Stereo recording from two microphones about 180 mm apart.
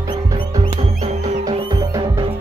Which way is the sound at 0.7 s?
35° right (ahead or behind).